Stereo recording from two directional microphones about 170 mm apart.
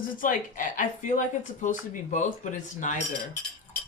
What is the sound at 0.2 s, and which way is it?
Speech, 50° left (ahead or behind).